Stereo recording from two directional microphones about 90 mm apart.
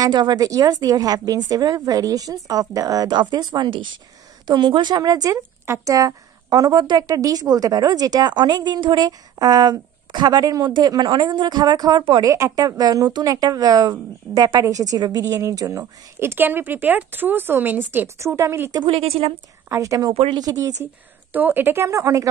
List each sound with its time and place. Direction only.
0.0 s a woman's voice: 50° right (ahead or behind)
7.1 s a woman's voice: 40° right (ahead or behind)
12.2 s a woman's voice: 35° right (ahead or behind)
18.9 s speech: 90° right
19.7 s a woman's voice: 35° right (ahead or behind)
20.8 s speech: 20° right (ahead or behind); by 22.3 s 35° right (ahead or behind)